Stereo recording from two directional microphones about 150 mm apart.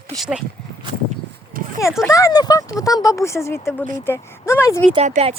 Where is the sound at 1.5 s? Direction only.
70° right (ahead or behind).